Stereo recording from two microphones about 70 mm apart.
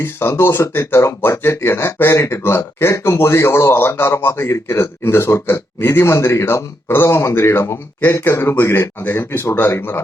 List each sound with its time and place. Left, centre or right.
0.0 s speech: left